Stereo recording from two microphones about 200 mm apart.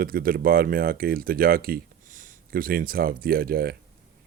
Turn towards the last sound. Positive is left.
turn(degrees=-50)  # may be behind; listen again after turning